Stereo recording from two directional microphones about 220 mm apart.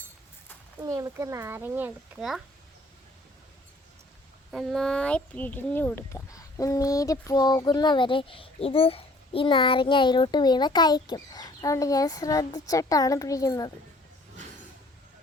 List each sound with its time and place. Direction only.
0.8 s speech: 15° right (ahead or behind)
4.5 s speech: centre (ahead or behind)